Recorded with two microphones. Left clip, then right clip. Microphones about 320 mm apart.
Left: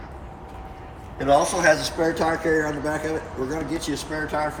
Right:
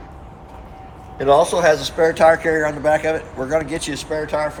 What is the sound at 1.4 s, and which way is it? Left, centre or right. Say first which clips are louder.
Speech: right 4 dB; centre.